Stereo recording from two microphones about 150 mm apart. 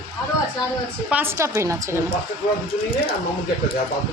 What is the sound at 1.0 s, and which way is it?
Speech, 15° right (ahead or behind).